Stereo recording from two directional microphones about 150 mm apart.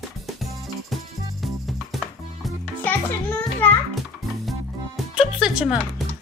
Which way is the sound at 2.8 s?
10° left (ahead or behind).